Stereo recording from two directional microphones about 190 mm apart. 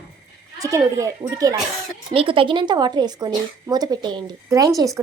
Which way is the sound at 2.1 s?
30° right (ahead or behind).